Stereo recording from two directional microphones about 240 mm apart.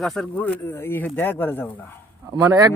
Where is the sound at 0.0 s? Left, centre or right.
Centre.